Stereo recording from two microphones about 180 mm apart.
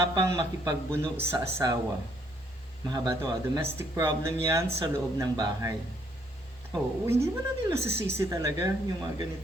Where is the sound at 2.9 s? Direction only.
20° right (ahead or behind).